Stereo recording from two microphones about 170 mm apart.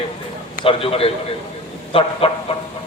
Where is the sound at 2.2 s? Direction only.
35° left (ahead or behind).